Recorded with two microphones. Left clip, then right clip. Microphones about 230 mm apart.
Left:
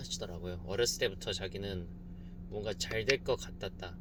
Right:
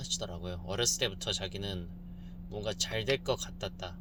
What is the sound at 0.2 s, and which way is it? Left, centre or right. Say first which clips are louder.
Speech: right 2 dB; right.